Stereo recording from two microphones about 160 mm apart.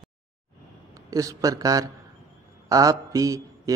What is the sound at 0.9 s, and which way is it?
A man's voice, 20° right (ahead or behind).